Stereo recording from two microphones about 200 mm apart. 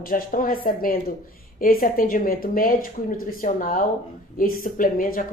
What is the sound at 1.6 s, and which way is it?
Speech, 45° left (ahead or behind).